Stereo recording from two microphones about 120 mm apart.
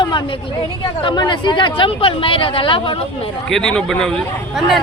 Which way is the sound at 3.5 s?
5° left (ahead or behind).